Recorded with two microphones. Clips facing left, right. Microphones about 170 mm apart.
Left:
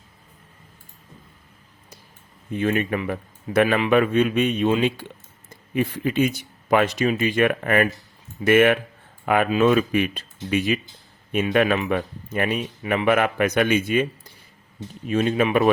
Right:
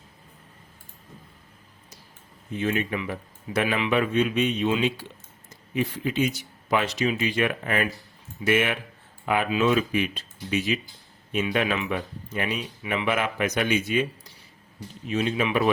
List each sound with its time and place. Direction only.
2.6 s speech: 55° left (ahead or behind)